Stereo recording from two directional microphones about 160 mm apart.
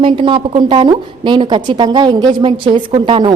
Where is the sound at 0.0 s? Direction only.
30° right (ahead or behind).